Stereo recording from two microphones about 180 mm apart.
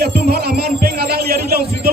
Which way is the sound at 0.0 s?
60° right (ahead or behind).